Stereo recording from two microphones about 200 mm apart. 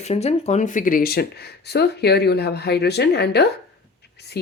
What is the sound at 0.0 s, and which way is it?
A woman's voice, 30° left (ahead or behind).